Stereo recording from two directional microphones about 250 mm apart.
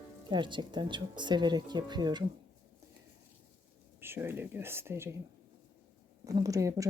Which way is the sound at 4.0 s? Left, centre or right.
Centre.